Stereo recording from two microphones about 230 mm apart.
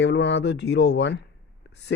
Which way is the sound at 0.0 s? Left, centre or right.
Left.